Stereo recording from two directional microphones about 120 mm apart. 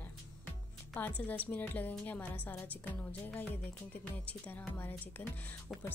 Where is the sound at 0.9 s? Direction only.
10° left (ahead or behind).